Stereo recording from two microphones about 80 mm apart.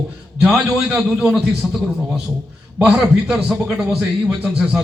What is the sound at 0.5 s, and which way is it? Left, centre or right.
A man's voice, centre.